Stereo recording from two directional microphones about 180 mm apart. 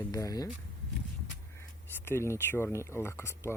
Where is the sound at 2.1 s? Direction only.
15° left (ahead or behind).